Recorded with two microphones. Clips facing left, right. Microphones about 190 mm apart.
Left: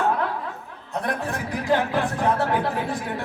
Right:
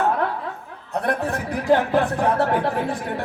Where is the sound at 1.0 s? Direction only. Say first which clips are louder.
Right 4 dB; 60° right (ahead or behind).